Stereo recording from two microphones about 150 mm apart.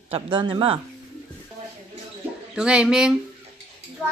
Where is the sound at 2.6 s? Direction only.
5° right (ahead or behind).